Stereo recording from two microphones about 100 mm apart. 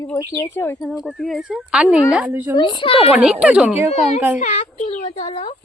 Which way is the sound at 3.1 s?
10° right (ahead or behind).